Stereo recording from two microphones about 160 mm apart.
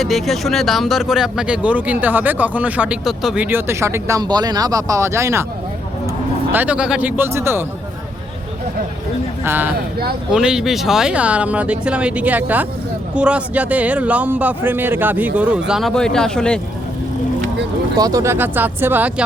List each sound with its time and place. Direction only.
0.0 s speech: centre (ahead or behind); by 5.5 s 15° right (ahead or behind)
6.5 s speech: 10° right (ahead or behind)
9.4 s speech: 10° right (ahead or behind)
9.7 s speech: 75° right (ahead or behind)
10.3 s speech: 5° right (ahead or behind)
17.9 s speech: 25° right (ahead or behind)